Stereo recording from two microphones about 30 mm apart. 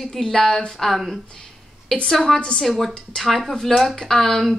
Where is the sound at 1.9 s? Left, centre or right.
Centre.